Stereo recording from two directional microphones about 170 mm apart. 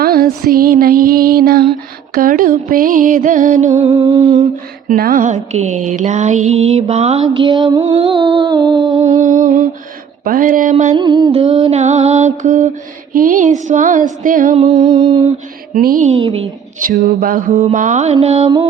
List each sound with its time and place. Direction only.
0.0 s music: 60° right (ahead or behind); by 3.9 s 40° right (ahead or behind)
4.0 s music: 30° right (ahead or behind)
4.9 s music: 55° right (ahead or behind); by 7.3 s 40° right (ahead or behind)
7.3 s music: 25° right (ahead or behind)
7.9 s music: 30° right (ahead or behind)
9.0 s music: 45° right (ahead or behind)
10.9 s music: 25° right (ahead or behind)
11.7 s mantra: 40° right (ahead or behind)
13.1 s music: 55° right (ahead or behind)
14.6 s mantra: 35° right (ahead or behind)
15.7 s music: 55° right (ahead or behind)
16.1 s mantra: 35° right (ahead or behind)
16.8 s music: 50° right (ahead or behind)